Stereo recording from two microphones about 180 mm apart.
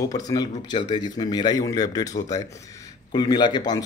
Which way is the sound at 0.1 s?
20° left (ahead or behind).